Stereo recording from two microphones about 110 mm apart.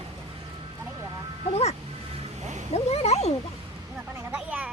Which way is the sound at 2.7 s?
75° left (ahead or behind).